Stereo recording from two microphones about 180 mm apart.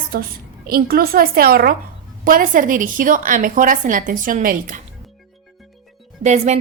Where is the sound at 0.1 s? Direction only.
55° right (ahead or behind).